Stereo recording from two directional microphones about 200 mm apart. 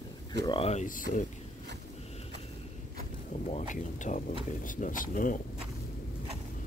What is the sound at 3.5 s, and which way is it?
Speech, 40° left (ahead or behind).